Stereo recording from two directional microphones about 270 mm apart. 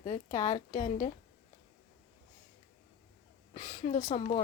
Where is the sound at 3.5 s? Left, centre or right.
Left.